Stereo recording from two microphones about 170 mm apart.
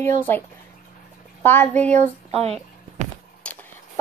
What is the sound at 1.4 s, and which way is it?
Speech, 10° left (ahead or behind).